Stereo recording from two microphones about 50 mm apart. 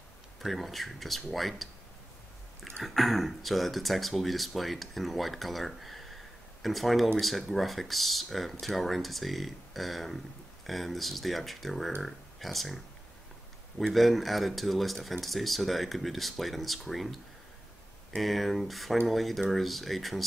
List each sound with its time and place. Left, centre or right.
0.4 s speech: centre
2.8 s speech: centre